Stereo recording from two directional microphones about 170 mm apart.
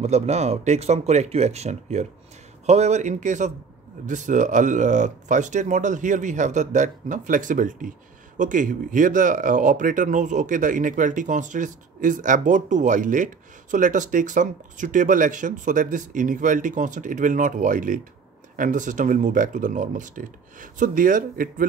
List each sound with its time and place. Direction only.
0.0 s speech: 40° right (ahead or behind)